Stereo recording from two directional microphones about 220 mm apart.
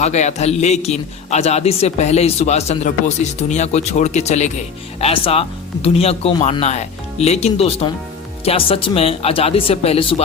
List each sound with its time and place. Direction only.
0.0 s a man's voice: 30° left (ahead or behind)